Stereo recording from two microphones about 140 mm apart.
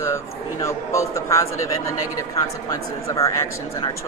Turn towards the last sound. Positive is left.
turn(degrees=25)  # may be behind; listen again after turning